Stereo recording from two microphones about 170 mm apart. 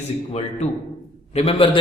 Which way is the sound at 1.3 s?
35° left (ahead or behind).